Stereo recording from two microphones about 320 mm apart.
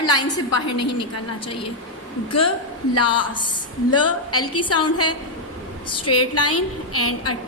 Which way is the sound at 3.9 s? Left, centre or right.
Left.